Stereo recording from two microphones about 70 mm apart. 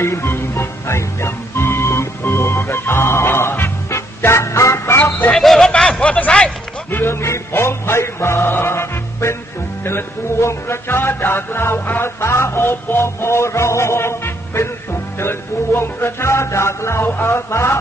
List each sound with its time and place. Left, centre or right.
0.0 s music: left
5.3 s speech: centre
5.7 s a sound: centre
6.9 s music: left